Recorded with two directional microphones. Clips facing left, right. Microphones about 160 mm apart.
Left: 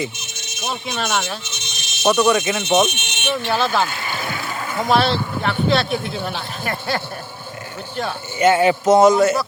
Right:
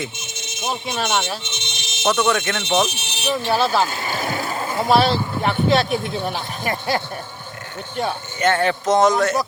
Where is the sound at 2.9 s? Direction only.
30° right (ahead or behind).